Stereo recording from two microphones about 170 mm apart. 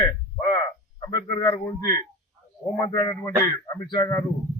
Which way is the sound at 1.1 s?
20° left (ahead or behind).